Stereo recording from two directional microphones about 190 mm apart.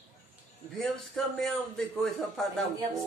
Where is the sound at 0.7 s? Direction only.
Centre (ahead or behind).